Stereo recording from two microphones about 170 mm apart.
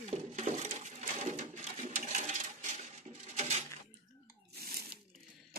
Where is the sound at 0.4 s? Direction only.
45° right (ahead or behind).